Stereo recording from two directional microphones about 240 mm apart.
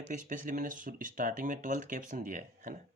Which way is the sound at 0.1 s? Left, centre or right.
Right.